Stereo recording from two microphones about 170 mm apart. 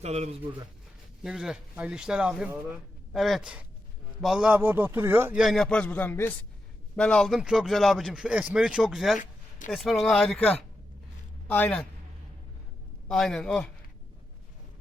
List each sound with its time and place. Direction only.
0.0 s speech: 40° right (ahead or behind)
1.2 s a man's voice: 5° right (ahead or behind)
5.4 s a man's voice: centre (ahead or behind)
9.1 s a sound: 50° left (ahead or behind)
9.7 s a man's voice: centre (ahead or behind)
13.1 s speech: 5° left (ahead or behind)